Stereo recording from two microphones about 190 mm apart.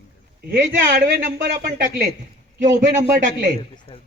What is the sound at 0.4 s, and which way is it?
Speech, 45° right (ahead or behind).